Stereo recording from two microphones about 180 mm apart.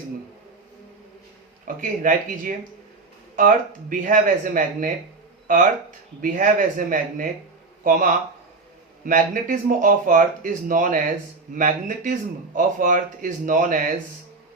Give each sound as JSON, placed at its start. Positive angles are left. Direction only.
{"t": 1.6, "sound": "speech", "side_deg": -50}
{"t": 6.2, "sound": "speech", "side_deg": -45}